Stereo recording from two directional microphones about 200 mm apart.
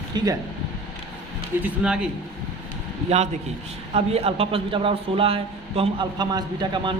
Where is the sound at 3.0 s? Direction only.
35° right (ahead or behind).